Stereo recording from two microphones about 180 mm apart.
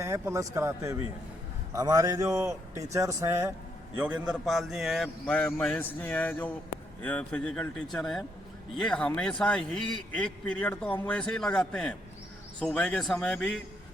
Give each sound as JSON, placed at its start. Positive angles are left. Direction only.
{"t": 0.0, "sound": "a man's voice", "side_deg": -15}